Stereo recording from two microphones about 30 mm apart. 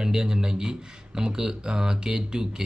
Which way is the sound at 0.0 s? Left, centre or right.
Right.